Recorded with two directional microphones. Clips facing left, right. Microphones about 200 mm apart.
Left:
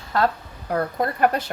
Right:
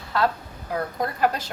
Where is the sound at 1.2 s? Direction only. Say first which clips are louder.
Left 3 dB; 60° left (ahead or behind).